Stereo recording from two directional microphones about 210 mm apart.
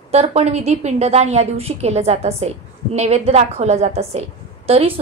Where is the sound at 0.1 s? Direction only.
30° right (ahead or behind).